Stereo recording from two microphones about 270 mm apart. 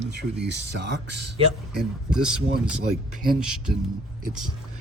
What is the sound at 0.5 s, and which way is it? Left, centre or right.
Speech, right.